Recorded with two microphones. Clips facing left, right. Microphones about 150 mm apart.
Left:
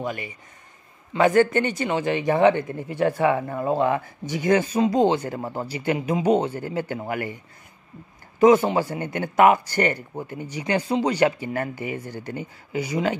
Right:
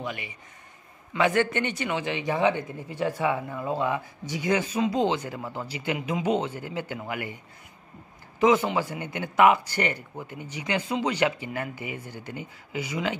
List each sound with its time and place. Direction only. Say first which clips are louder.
0.0 s speech: left 5 dB; 45° left (ahead or behind)
8.4 s speech: left 5 dB; 40° left (ahead or behind)